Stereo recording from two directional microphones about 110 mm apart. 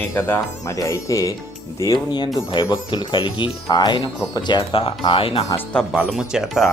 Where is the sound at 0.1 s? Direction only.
25° left (ahead or behind); by 4.8 s 40° left (ahead or behind).